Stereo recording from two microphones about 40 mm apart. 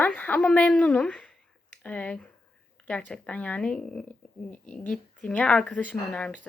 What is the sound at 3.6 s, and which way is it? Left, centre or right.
Speech, left.